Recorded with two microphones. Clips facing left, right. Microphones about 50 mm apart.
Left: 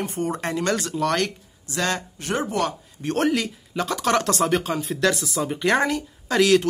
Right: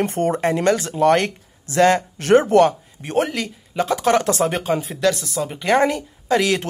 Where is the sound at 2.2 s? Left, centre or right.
Right.